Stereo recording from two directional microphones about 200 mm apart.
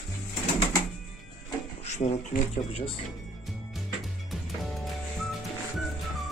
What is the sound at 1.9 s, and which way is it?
Speech, 35° left (ahead or behind).